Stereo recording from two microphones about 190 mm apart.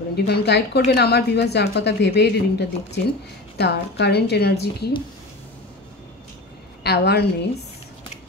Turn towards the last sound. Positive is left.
turn(degrees=55)  # may be behind; listen again after turning